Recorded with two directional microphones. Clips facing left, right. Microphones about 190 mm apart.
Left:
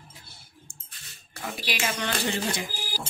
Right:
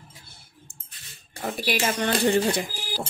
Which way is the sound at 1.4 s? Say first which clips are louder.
Right 6 dB; 40° right (ahead or behind).